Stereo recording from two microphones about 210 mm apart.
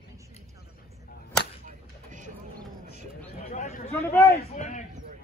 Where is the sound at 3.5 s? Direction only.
35° left (ahead or behind).